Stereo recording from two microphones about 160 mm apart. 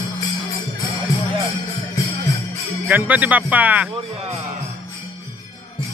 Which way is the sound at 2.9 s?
10° right (ahead or behind).